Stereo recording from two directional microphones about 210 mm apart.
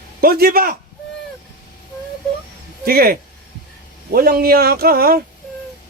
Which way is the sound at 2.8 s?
45° right (ahead or behind).